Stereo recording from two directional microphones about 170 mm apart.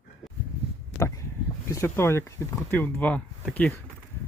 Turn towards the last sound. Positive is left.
turn(degrees=5)  # may be behind; listen again after turning